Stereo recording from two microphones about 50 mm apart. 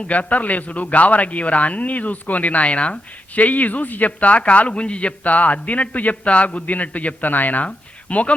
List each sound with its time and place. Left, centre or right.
0.0 s a man's voice: left